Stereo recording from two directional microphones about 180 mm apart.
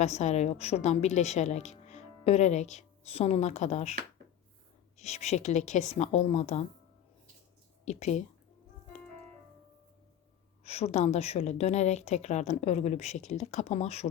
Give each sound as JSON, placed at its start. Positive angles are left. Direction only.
{"t": 0.0, "sound": "a woman's voice", "side_deg": 40}
{"t": 4.9, "sound": "a woman's voice", "side_deg": 40}
{"t": 7.9, "sound": "a woman's voice", "side_deg": 40}
{"t": 10.6, "sound": "a woman's voice", "side_deg": 35}